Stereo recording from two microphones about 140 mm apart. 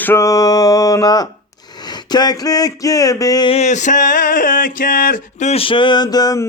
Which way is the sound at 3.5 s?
55° left (ahead or behind).